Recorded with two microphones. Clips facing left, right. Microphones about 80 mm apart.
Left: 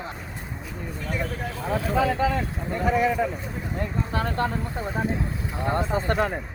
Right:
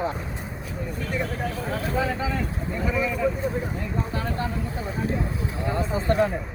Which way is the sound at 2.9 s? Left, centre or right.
Left.